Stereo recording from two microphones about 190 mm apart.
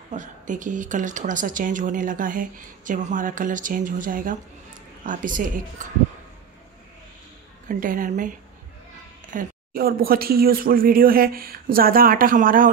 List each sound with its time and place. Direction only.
0.1 s speech: 40° right (ahead or behind)
7.6 s speech: 45° right (ahead or behind)